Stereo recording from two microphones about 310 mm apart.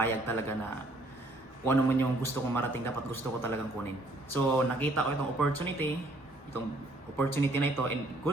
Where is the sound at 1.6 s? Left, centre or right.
Centre.